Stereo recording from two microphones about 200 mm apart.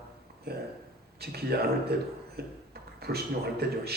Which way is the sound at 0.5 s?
50° right (ahead or behind).